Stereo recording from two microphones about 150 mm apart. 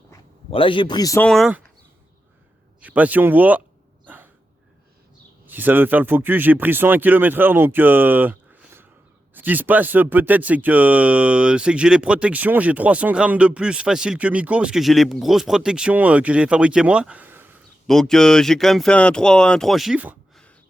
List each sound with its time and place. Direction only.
0.5 s a man's voice: 35° left (ahead or behind)
1.2 s speech: centre (ahead or behind)
2.8 s speech: 10° right (ahead or behind)
4.0 s dog: 10° right (ahead or behind)
5.5 s speech: 10° right (ahead or behind)
17.8 s speech: centre (ahead or behind)